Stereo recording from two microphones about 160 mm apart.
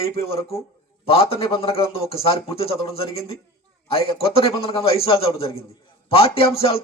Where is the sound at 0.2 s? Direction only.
35° left (ahead or behind).